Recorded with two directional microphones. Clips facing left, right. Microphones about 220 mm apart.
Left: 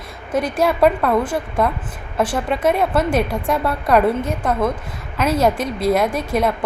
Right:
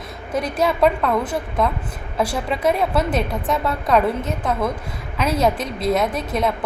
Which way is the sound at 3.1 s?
10° left (ahead or behind).